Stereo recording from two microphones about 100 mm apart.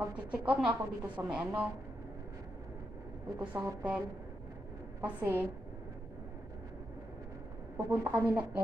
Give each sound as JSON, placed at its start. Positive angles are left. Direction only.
{"t": 0.3, "sound": "a woman's voice", "side_deg": -10}
{"t": 3.3, "sound": "a woman's voice", "side_deg": -15}
{"t": 5.0, "sound": "speech", "side_deg": -20}
{"t": 7.7, "sound": "speech", "side_deg": -20}